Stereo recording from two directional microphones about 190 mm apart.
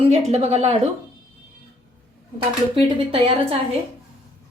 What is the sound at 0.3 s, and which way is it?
Speech, 35° right (ahead or behind).